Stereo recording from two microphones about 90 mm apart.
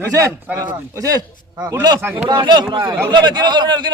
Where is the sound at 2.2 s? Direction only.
55° right (ahead or behind).